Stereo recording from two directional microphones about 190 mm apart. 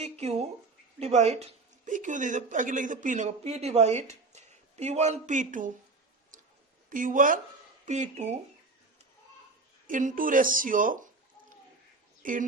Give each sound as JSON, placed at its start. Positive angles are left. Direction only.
{"t": 0.0, "sound": "speech", "side_deg": -35}
{"t": 6.9, "sound": "a woman's voice", "side_deg": -45}
{"t": 9.8, "sound": "a woman's voice", "side_deg": -45}
{"t": 12.2, "sound": "speech", "side_deg": -45}